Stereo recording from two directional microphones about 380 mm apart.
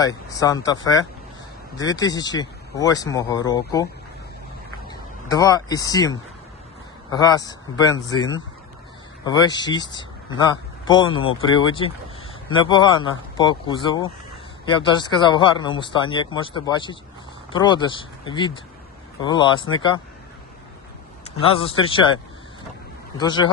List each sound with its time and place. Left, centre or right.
0.0 s speech: centre
4.9 s speech: centre
9.2 s speech: centre
21.3 s speech: centre